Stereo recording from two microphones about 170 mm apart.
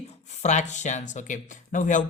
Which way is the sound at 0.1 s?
40° left (ahead or behind).